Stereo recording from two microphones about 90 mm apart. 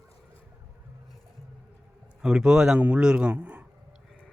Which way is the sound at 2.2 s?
5° right (ahead or behind).